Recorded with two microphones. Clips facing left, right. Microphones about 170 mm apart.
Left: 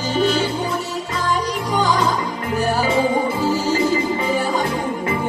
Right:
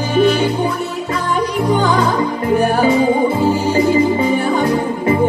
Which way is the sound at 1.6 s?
55° right (ahead or behind).